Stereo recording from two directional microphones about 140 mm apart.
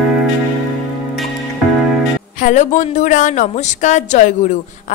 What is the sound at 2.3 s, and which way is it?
A woman's voice, 65° left (ahead or behind).